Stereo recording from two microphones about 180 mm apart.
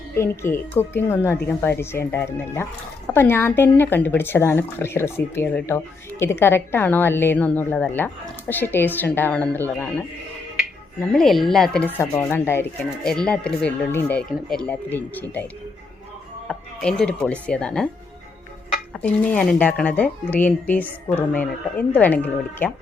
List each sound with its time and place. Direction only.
0.2 s speech: 15° left (ahead or behind)
11.1 s speech: centre (ahead or behind)
16.5 s music: 5° left (ahead or behind)
17.4 s speech: 5° left (ahead or behind)
18.9 s speech: 10° left (ahead or behind)